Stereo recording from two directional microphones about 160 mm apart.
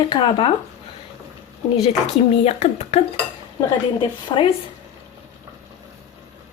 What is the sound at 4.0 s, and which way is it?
Speech, 30° left (ahead or behind).